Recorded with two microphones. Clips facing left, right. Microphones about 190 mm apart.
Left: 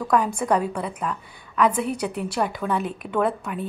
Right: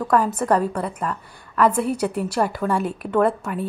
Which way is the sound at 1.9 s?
5° right (ahead or behind).